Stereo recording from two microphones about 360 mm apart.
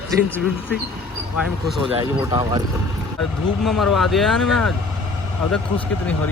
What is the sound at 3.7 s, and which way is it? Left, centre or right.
Speech, centre.